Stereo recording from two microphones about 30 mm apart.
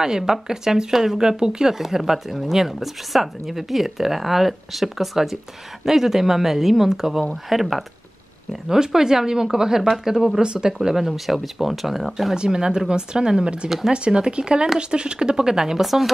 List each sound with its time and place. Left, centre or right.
0.0 s speech: centre
1.8 s speech: centre
8.6 s speech: centre
10.4 s speech: right
10.7 s speech: centre
12.4 s speech: right
13.7 s speech: centre
13.9 s speech: right; by 15.8 s centre
15.8 s a woman's voice: centre